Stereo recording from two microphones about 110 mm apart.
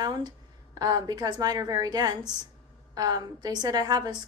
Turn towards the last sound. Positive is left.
turn(degrees=-35)  # may be behind; listen again after turning